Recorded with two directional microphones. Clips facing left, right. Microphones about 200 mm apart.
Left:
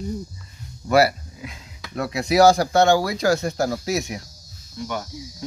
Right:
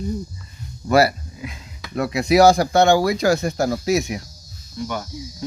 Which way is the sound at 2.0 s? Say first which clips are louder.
Right 2 dB; 15° right (ahead or behind).